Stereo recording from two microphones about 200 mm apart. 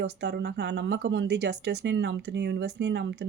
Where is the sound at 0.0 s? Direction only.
55° right (ahead or behind).